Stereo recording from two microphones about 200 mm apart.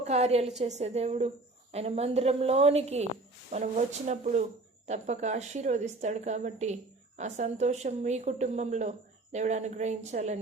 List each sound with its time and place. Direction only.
0.0 s a woman's voice: 35° right (ahead or behind)